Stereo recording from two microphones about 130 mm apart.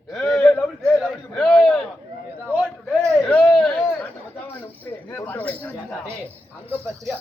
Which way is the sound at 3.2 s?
5° left (ahead or behind).